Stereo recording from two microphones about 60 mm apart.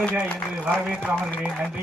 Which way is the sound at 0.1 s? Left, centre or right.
Centre.